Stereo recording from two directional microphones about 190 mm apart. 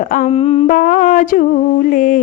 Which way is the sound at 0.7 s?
45° left (ahead or behind).